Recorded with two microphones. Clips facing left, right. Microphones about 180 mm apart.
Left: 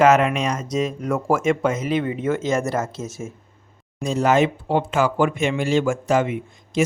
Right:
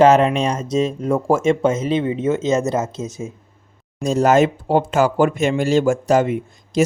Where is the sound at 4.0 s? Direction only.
40° right (ahead or behind).